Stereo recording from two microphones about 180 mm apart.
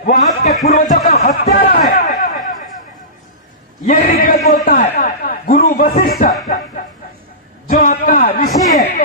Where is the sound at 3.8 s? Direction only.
50° left (ahead or behind).